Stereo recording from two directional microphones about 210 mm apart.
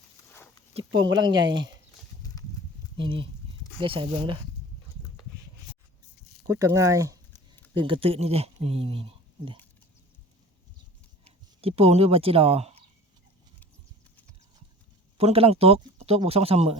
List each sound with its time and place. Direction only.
0.7 s a sound: 25° right (ahead or behind)
1.1 s speech: 20° right (ahead or behind)
3.0 s speech: 25° right (ahead or behind)
6.5 s speech: 15° right (ahead or behind)
11.6 s speech: 30° right (ahead or behind)
15.2 s speech: 30° right (ahead or behind)